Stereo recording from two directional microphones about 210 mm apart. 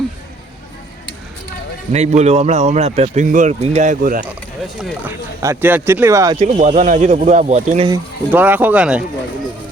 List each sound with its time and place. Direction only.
1.9 s speech: 30° right (ahead or behind)
4.8 s speech: 5° right (ahead or behind)
6.3 s speech: 30° right (ahead or behind)
7.9 s speech: 10° right (ahead or behind)